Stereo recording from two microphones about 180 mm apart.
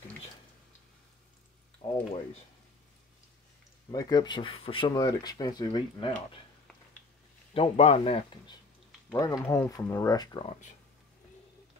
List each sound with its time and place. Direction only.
1.8 s a sound: 30° left (ahead or behind)
3.9 s speech: 20° left (ahead or behind)
7.5 s speech: 35° left (ahead or behind)
9.1 s speech: 15° left (ahead or behind)